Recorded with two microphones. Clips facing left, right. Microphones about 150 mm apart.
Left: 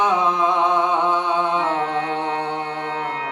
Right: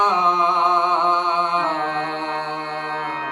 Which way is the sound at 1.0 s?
10° left (ahead or behind).